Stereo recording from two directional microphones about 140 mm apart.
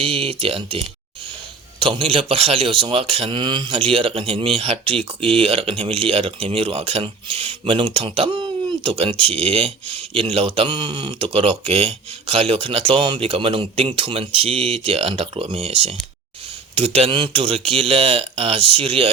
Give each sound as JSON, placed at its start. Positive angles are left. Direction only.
{"t": 0.0, "sound": "speech", "side_deg": -40}